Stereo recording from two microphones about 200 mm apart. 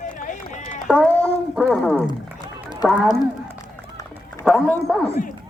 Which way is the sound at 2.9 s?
Centre (ahead or behind).